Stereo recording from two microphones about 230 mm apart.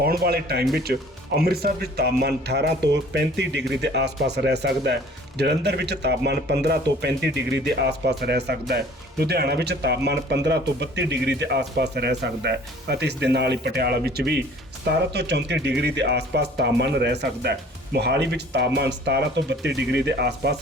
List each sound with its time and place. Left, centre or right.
0.0 s speech: right